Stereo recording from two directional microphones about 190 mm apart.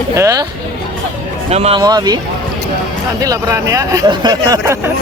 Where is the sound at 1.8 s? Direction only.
20° right (ahead or behind).